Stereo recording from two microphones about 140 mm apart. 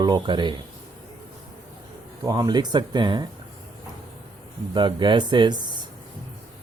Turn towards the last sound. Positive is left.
turn(degrees=-35)  # may be behind; listen again after turning